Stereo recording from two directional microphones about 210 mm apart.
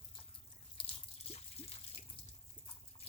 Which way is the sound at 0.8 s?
25° left (ahead or behind).